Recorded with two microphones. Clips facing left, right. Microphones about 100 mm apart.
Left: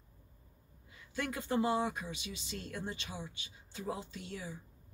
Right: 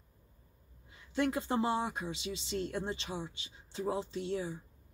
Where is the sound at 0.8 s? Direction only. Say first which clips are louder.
Right 7 dB; 25° right (ahead or behind).